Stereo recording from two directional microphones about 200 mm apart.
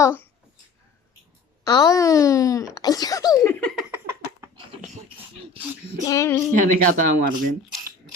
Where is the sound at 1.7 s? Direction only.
20° left (ahead or behind).